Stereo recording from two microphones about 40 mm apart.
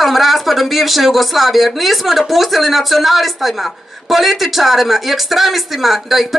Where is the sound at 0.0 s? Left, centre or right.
Centre.